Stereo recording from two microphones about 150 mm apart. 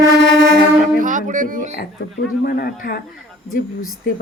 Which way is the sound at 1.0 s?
60° right (ahead or behind).